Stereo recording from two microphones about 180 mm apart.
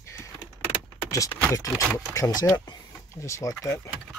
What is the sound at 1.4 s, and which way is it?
Speech, 15° left (ahead or behind).